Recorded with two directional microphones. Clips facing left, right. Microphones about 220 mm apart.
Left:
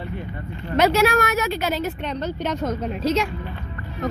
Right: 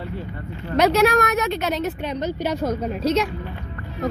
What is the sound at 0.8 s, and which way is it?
Speech, centre (ahead or behind).